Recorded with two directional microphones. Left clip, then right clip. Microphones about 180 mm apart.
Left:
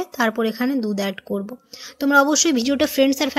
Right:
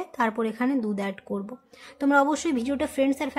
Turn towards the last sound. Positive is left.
turn(degrees=20)  # may be behind; listen again after turning